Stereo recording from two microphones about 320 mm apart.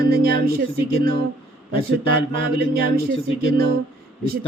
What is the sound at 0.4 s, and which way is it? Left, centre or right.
Mantra, right.